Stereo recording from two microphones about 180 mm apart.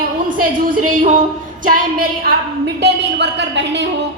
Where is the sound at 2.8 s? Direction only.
70° right (ahead or behind).